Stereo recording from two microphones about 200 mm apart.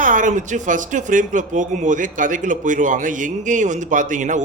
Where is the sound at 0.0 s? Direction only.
40° right (ahead or behind).